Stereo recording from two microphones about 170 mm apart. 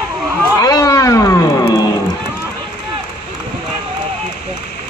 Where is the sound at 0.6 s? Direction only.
20° left (ahead or behind).